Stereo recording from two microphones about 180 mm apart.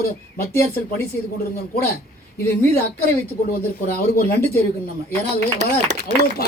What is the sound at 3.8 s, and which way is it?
Speech, 55° left (ahead or behind).